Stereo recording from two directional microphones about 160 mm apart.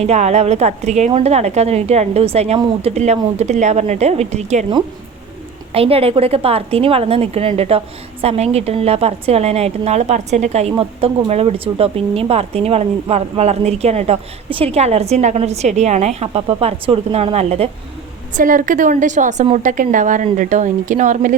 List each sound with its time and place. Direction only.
0.0 s a woman's voice: 45° right (ahead or behind)
5.7 s a woman's voice: 35° right (ahead or behind)
18.3 s speech: 55° right (ahead or behind)